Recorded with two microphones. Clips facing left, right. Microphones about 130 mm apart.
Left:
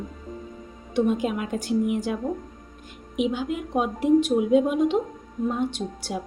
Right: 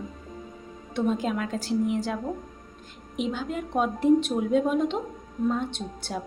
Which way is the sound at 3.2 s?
5° left (ahead or behind).